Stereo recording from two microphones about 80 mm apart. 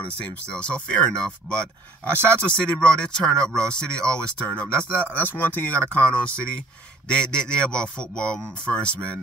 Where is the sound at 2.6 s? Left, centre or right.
Centre.